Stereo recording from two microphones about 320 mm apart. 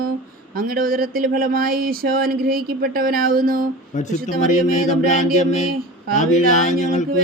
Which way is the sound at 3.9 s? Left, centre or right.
Left.